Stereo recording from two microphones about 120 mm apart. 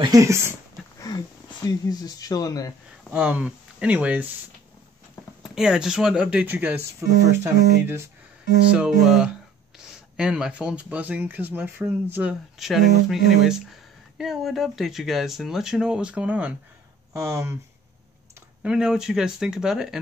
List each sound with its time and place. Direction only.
0.1 s speech: 25° right (ahead or behind)
1.1 s a sound: 35° left (ahead or behind)
1.7 s speech: 30° left (ahead or behind)
3.1 s speech: 10° right (ahead or behind)
5.4 s speech: 5° right (ahead or behind); by 8.1 s 20° right (ahead or behind)
8.7 s speech: 5° right (ahead or behind)
17.1 s speech: 25° right (ahead or behind)
18.6 s speech: 5° right (ahead or behind)